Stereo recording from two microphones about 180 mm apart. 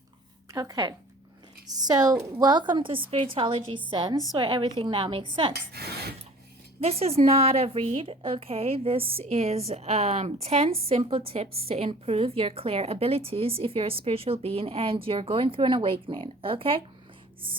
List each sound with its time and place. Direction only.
0.5 s a woman's voice: 20° right (ahead or behind)
5.7 s speech: 60° right (ahead or behind)
6.7 s a woman's voice: 35° right (ahead or behind)